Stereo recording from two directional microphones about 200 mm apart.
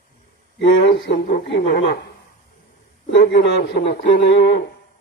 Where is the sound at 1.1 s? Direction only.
35° left (ahead or behind).